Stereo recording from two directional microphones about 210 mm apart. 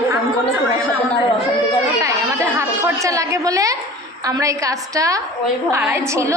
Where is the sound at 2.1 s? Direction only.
15° right (ahead or behind).